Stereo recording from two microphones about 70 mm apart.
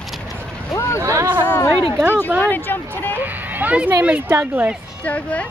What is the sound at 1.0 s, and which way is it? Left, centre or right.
Speech, right.